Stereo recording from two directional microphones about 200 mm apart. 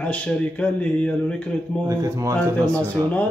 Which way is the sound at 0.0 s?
5° left (ahead or behind).